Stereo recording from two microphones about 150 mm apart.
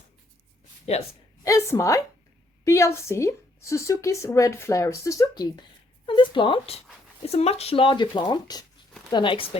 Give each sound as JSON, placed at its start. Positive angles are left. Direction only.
{"t": 1.5, "sound": "a woman's voice", "side_deg": 20}